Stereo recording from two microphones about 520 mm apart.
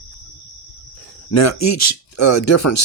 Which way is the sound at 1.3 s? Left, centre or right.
Left.